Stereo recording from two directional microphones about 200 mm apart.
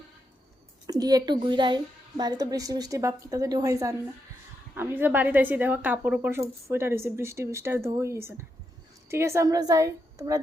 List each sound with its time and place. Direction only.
0.9 s speech: 20° right (ahead or behind)